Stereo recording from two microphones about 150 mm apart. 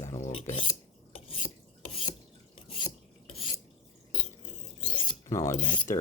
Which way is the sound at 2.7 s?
40° left (ahead or behind).